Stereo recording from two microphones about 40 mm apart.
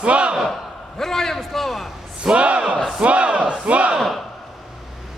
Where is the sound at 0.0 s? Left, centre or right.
Right.